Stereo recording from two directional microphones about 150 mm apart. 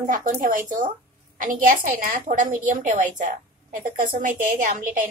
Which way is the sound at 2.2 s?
60° right (ahead or behind).